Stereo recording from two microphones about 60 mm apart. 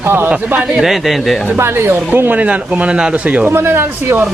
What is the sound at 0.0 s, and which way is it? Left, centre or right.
Speech, right.